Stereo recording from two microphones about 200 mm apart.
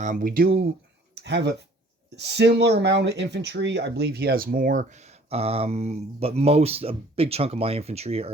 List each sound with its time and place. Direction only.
0.0 s speech: 40° right (ahead or behind)
1.1 s speech: 60° right (ahead or behind); by 8.3 s 30° right (ahead or behind)